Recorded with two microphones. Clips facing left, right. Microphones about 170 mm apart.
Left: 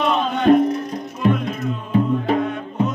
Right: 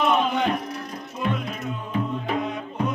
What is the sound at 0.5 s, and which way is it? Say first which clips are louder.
Music: left 13 dB; 50° left (ahead or behind).